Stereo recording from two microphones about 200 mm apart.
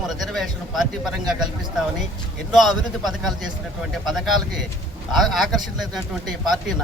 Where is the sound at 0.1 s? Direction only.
Centre (ahead or behind).